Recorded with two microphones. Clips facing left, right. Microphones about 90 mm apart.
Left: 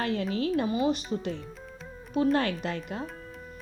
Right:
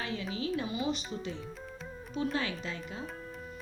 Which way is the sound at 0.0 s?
55° left (ahead or behind).